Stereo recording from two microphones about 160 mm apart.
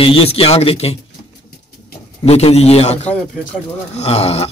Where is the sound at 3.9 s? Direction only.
40° left (ahead or behind).